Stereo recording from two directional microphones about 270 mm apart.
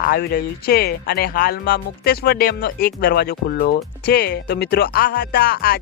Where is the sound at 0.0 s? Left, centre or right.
Left.